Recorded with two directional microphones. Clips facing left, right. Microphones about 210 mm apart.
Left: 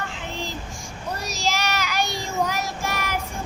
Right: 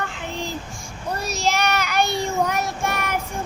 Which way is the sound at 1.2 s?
55° right (ahead or behind).